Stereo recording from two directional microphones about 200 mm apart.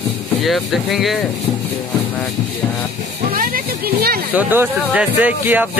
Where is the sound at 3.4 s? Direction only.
50° right (ahead or behind).